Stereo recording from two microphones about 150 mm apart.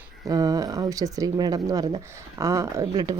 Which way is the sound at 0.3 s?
25° right (ahead or behind).